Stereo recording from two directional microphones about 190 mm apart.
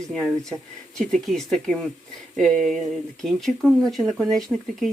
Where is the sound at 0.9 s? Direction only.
5° left (ahead or behind).